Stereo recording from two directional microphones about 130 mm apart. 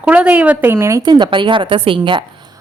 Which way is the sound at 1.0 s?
35° right (ahead or behind).